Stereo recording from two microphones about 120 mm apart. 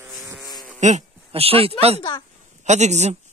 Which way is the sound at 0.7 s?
80° right.